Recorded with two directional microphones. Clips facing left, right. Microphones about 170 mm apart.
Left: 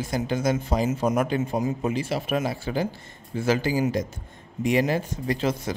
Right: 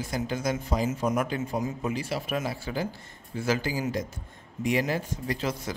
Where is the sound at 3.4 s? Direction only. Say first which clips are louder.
Left 5 dB; 25° left (ahead or behind).